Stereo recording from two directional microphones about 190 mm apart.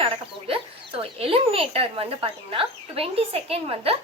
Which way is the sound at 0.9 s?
30° right (ahead or behind).